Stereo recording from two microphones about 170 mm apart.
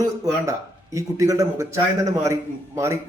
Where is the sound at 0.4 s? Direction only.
20° right (ahead or behind).